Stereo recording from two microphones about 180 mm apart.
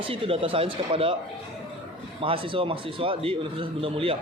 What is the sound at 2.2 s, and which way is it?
A man's voice, 30° right (ahead or behind).